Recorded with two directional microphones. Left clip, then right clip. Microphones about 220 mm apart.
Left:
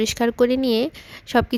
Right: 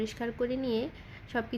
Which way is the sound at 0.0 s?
50° left (ahead or behind).